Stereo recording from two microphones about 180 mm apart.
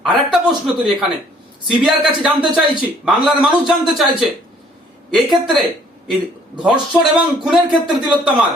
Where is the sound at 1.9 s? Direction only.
5° right (ahead or behind).